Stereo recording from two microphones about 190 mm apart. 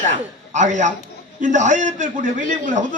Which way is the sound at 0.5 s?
40° right (ahead or behind).